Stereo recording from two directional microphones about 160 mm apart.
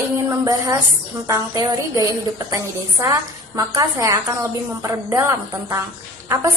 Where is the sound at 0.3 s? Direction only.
20° right (ahead or behind).